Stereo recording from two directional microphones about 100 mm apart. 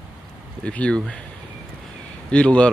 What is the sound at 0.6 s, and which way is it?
Speech, 10° left (ahead or behind).